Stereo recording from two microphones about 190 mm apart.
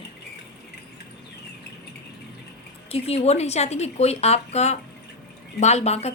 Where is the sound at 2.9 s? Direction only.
30° left (ahead or behind).